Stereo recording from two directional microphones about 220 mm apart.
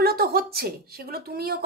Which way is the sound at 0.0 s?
45° right (ahead or behind).